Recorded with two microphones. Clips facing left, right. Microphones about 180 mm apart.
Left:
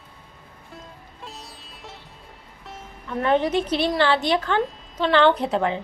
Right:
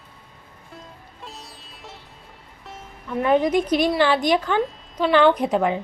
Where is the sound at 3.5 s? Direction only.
10° right (ahead or behind).